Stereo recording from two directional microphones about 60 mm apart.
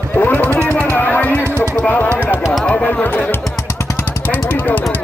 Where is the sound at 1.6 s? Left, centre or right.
Left.